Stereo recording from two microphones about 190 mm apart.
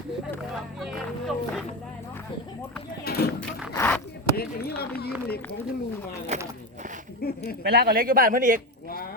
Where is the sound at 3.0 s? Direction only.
55° left (ahead or behind).